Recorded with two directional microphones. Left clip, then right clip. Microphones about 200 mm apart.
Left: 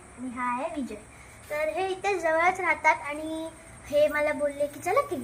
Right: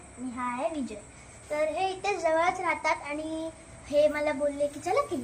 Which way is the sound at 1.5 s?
20° left (ahead or behind).